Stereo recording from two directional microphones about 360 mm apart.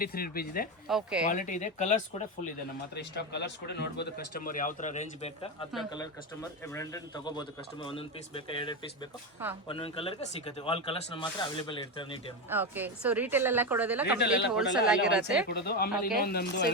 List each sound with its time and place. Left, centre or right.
0.0 s speech: left
0.9 s speech: centre
1.2 s speech: left
6.7 s speech: centre
12.5 s speech: centre
15.4 s speech: left